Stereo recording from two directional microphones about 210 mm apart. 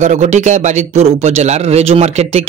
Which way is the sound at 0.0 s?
35° right (ahead or behind).